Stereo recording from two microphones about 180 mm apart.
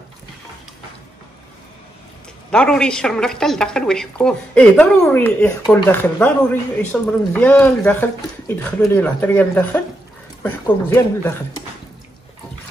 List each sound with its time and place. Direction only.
2.5 s a woman's voice: 5° left (ahead or behind)